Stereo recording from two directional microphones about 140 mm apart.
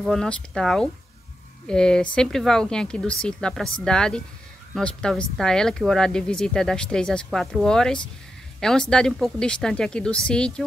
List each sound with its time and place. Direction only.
0.0 s speech: 5° left (ahead or behind)